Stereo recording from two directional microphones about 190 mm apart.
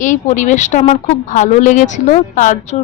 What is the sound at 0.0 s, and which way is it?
A woman's voice, 40° left (ahead or behind).